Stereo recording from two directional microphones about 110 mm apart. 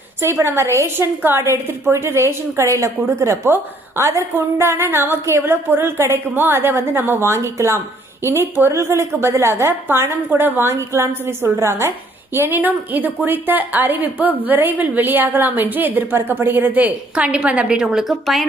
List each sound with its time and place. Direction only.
0.2 s a woman's voice: 25° right (ahead or behind); by 18.4 s 5° right (ahead or behind)